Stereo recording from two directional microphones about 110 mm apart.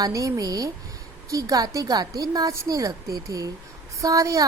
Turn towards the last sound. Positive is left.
turn(degrees=-30)  # may be behind; listen again after turning